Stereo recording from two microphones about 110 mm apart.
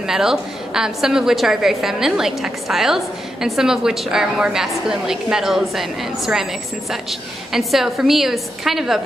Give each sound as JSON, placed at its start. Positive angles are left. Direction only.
{"t": 0.0, "sound": "a woman's voice", "side_deg": -5}